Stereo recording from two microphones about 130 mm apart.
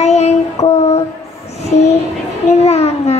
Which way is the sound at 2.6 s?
55° left (ahead or behind).